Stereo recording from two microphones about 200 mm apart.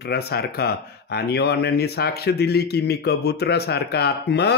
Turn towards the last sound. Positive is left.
turn(degrees=55)  # may be behind; listen again after turning